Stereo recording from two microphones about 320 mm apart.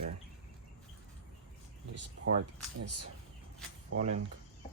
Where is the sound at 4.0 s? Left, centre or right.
Right.